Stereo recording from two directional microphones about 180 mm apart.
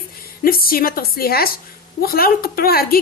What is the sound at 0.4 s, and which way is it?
A woman's voice, 55° left (ahead or behind).